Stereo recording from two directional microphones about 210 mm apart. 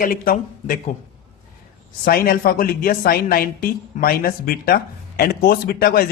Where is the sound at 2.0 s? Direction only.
45° left (ahead or behind).